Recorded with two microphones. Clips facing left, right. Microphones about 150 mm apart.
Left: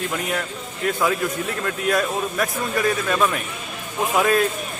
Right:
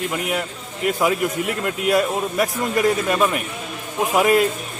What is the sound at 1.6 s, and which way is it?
A man's voice, 15° right (ahead or behind).